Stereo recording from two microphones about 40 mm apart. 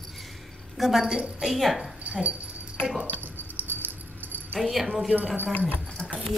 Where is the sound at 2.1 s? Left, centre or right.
Right.